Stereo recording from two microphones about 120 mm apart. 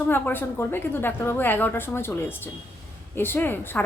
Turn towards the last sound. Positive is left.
turn(degrees=15)  # may be behind; listen again after turning